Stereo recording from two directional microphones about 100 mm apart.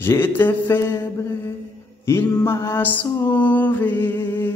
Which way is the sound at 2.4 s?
25° left (ahead or behind).